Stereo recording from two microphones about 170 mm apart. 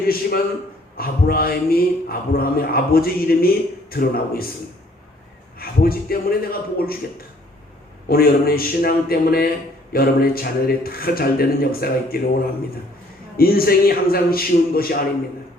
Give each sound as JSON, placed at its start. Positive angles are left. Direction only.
{"t": 0.1, "sound": "a man's voice", "side_deg": 60}
{"t": 5.5, "sound": "a man's voice", "side_deg": 60}
{"t": 8.0, "sound": "a man's voice", "side_deg": 60}
{"t": 13.3, "sound": "a man's voice", "side_deg": 60}